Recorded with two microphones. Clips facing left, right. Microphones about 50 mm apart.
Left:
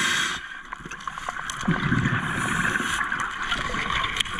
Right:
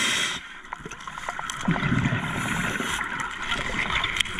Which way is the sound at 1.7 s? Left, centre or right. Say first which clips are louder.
Left 1 dB; right.